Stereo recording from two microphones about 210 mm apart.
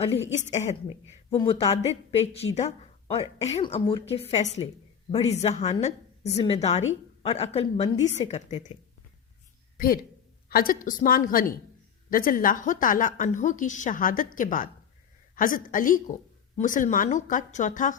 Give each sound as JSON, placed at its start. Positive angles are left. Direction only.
{"t": 0.3, "sound": "a woman's voice", "side_deg": 35}
{"t": 9.7, "sound": "a woman's voice", "side_deg": 45}